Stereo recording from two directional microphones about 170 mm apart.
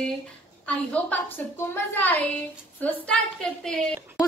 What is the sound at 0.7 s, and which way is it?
A woman's voice, 10° left (ahead or behind).